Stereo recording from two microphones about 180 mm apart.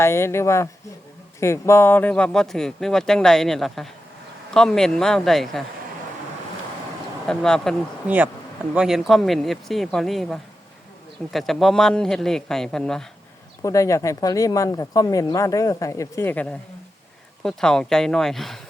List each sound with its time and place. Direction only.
0.0 s speech: 15° left (ahead or behind)
7.3 s speech: 5° left (ahead or behind)
13.6 s speech: 15° left (ahead or behind); by 18.6 s centre (ahead or behind)